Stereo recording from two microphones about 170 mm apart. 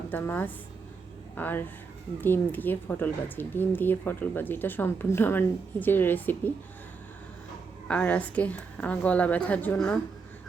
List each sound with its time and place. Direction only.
0.1 s a woman's voice: 10° left (ahead or behind)
7.9 s a woman's voice: 5° left (ahead or behind)